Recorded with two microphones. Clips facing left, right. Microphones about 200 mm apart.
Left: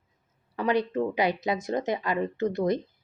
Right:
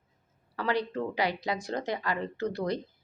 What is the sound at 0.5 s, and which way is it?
Speech, 20° left (ahead or behind).